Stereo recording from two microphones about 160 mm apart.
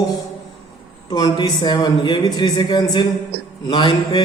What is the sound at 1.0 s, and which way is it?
A man's voice, 25° left (ahead or behind).